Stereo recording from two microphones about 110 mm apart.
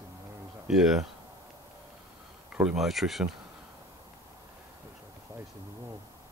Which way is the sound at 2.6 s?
Centre (ahead or behind).